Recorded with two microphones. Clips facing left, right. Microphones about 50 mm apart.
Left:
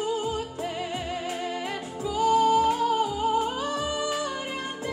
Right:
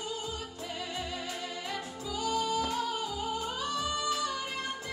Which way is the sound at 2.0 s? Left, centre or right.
Left.